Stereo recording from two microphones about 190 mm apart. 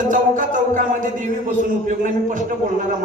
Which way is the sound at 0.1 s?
45° right (ahead or behind).